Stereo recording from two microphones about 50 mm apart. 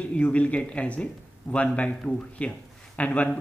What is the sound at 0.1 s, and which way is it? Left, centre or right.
Speech, left.